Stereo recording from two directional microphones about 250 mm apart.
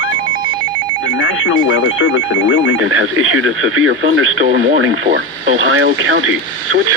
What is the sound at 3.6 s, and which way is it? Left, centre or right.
Speech, right.